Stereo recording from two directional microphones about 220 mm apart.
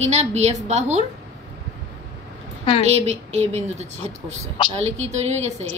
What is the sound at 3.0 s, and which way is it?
A woman's voice, 30° right (ahead or behind).